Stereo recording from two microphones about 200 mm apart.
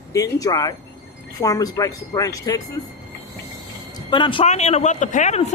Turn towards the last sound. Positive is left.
turn(degrees=35)  # may be behind; listen again after turning